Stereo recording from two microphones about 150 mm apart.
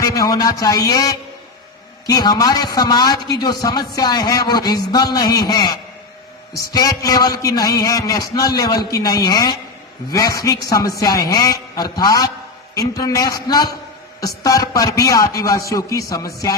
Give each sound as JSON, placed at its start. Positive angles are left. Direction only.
{"t": 0.0, "sound": "a man's voice", "side_deg": 25}